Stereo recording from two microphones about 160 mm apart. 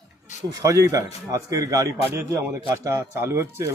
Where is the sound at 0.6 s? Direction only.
20° right (ahead or behind).